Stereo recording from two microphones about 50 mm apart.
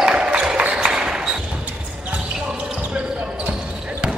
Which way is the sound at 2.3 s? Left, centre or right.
Centre.